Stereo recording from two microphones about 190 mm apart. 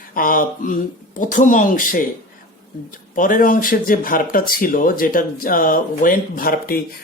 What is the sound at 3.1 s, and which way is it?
Speech, 45° left (ahead or behind).